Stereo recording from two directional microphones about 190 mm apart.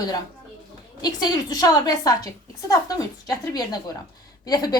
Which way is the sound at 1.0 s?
20° left (ahead or behind).